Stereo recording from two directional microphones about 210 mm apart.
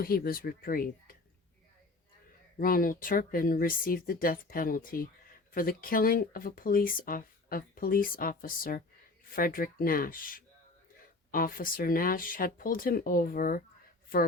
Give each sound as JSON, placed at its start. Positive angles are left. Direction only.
{"t": 0.0, "sound": "speech", "side_deg": 45}
{"t": 2.6, "sound": "speech", "side_deg": 40}